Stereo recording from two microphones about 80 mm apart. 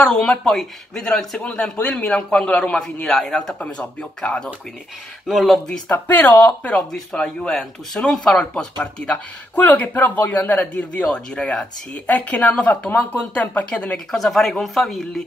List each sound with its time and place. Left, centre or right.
0.0 s speech: centre
3.5 s speech: centre
5.2 s speech: centre
5.9 s speech: left
14.1 s speech: centre